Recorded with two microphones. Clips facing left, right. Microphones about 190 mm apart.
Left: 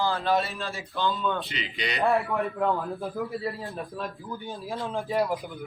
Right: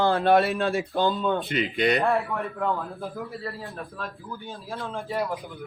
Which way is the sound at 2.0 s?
Centre (ahead or behind).